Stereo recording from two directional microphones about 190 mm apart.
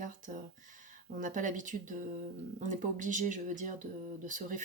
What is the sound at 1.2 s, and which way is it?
Speech, 40° right (ahead or behind).